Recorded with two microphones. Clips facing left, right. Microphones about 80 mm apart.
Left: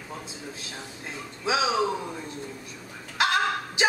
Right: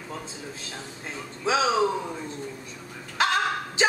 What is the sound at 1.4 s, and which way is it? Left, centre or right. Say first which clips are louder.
Speech: right 2 dB; centre.